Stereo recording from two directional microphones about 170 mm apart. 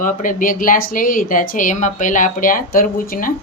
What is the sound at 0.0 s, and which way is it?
Speech, 50° left (ahead or behind).